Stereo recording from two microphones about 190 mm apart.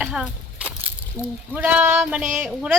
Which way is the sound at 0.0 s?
5° right (ahead or behind).